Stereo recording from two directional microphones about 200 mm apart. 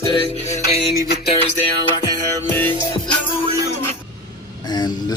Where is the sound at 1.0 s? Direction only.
50° left (ahead or behind).